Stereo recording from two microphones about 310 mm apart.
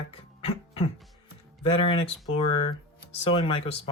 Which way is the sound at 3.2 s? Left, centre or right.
Centre.